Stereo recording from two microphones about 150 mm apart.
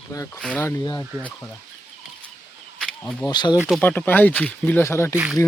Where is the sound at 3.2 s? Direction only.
30° left (ahead or behind).